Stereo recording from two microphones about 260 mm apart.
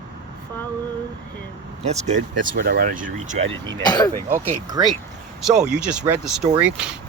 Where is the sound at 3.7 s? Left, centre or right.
Centre.